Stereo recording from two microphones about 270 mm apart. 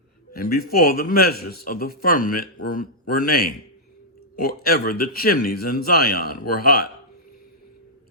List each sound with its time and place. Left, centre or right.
0.3 s speech: left